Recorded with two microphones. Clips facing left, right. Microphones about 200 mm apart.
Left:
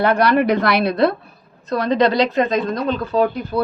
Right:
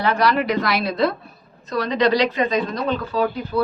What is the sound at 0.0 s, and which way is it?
A woman's voice, 55° left (ahead or behind).